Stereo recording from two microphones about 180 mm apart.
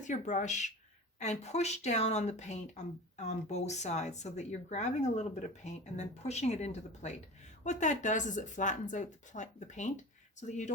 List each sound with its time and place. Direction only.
0.0 s speech: 45° left (ahead or behind)